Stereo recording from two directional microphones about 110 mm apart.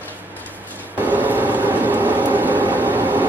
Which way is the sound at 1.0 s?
15° right (ahead or behind).